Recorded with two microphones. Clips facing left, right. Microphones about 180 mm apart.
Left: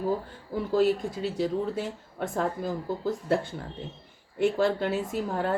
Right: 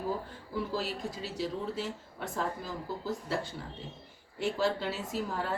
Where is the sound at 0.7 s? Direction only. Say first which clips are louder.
Left 11 dB; 55° left (ahead or behind).